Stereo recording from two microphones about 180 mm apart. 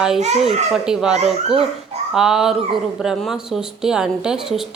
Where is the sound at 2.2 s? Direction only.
5° right (ahead or behind).